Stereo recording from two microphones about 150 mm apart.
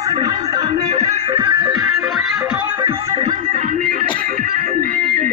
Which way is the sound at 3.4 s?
60° right (ahead or behind).